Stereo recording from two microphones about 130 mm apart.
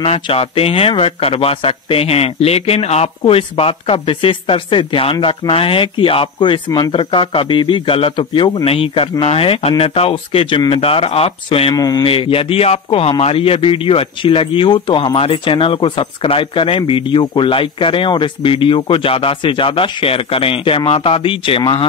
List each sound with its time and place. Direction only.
0.0 s speech: 50° left (ahead or behind)
11.7 s speech: 30° left (ahead or behind)
12.0 s speech: 45° left (ahead or behind)